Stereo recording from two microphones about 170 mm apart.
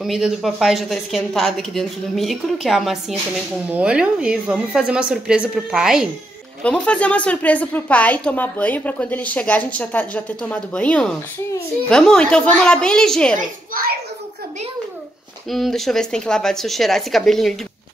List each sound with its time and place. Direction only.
0.0 s a woman's voice: centre (ahead or behind)
13.4 s a woman's voice: 60° right (ahead or behind)
15.5 s a woman's voice: centre (ahead or behind)